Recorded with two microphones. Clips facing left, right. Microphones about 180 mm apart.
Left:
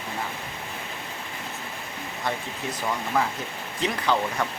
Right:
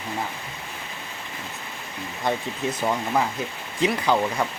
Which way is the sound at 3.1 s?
15° right (ahead or behind).